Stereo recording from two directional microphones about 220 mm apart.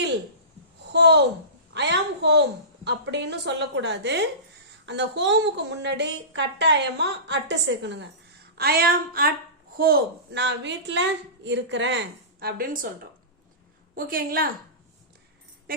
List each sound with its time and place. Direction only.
0.8 s a sound: 50° right (ahead or behind)
1.7 s a woman's voice: 50° right (ahead or behind)
8.5 s a woman's voice: 45° right (ahead or behind)
13.9 s a woman's voice: 40° right (ahead or behind)